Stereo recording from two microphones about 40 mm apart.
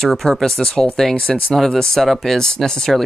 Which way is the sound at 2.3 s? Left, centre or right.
Centre.